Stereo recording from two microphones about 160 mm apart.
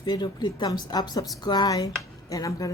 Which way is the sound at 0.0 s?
25° left (ahead or behind).